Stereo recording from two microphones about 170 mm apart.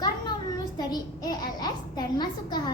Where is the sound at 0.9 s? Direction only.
25° left (ahead or behind).